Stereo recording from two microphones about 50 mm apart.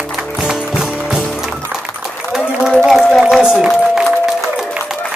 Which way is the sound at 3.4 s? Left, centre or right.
Centre.